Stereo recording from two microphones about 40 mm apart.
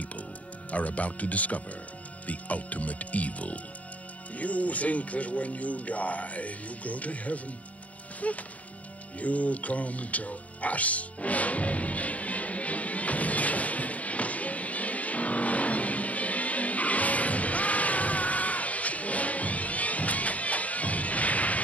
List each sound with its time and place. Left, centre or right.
0.7 s speech: left
9.2 s music: left